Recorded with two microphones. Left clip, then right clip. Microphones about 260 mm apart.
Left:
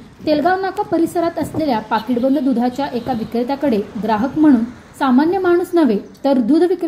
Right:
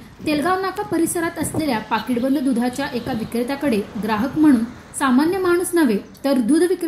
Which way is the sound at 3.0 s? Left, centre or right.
Centre.